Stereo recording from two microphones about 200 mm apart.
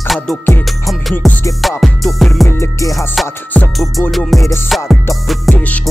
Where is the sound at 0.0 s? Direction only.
Centre (ahead or behind).